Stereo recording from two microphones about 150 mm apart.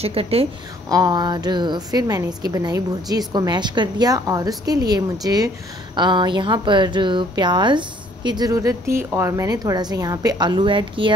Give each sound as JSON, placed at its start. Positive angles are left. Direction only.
{"t": 0.0, "sound": "a woman's voice", "side_deg": -40}
{"t": 0.8, "sound": "a woman's voice", "side_deg": -25}